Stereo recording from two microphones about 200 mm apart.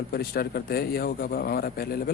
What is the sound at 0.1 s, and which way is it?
A man's voice, 50° left (ahead or behind).